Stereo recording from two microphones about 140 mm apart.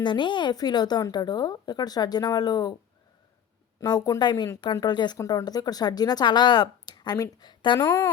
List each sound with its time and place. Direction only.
0.0 s speech: 35° left (ahead or behind)
3.8 s speech: 25° left (ahead or behind)